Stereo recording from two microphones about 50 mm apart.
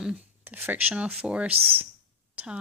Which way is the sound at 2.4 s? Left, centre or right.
Right.